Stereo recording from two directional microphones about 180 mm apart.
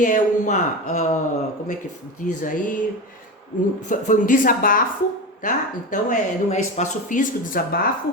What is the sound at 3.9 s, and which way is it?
Speech, 45° left (ahead or behind).